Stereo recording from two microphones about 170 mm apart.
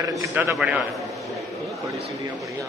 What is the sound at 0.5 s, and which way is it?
Speech, centre (ahead or behind).